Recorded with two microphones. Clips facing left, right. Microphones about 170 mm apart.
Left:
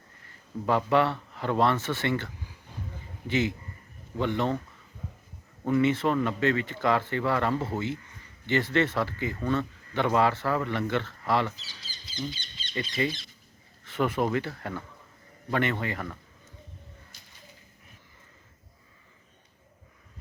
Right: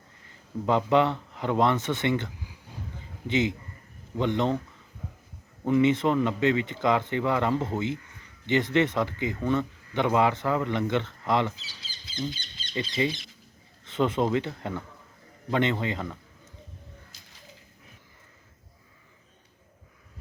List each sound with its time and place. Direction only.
0.2 s speech: 20° right (ahead or behind)
5.6 s speech: 20° right (ahead or behind)
12.7 s speech: 20° right (ahead or behind)